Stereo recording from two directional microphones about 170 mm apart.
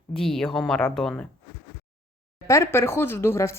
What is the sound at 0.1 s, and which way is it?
Speech, 5° left (ahead or behind).